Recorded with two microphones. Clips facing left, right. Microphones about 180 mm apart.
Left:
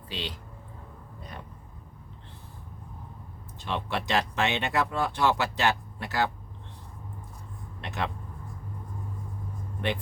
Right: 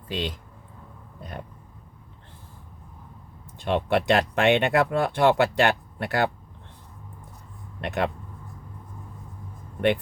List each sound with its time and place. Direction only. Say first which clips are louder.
0.1 s speech: right 7 dB; 50° right (ahead or behind)
3.6 s speech: right 8 dB; 55° right (ahead or behind)
7.8 s speech: right 7 dB; 55° right (ahead or behind)